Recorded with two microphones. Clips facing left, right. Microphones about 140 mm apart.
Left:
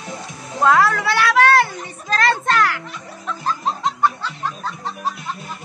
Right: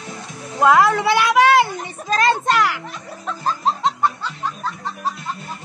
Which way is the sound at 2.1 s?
15° right (ahead or behind).